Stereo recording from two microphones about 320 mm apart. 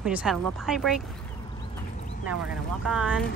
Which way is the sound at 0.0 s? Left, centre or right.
Centre.